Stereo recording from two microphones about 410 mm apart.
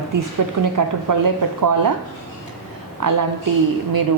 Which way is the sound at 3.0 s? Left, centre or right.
Right.